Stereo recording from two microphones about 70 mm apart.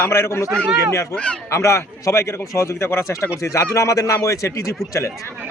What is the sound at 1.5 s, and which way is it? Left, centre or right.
A man's voice, left.